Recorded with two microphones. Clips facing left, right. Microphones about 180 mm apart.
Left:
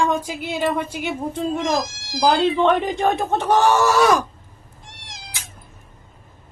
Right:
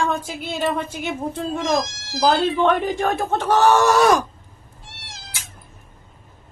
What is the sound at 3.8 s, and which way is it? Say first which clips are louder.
Groan: right 1 dB; centre (ahead or behind).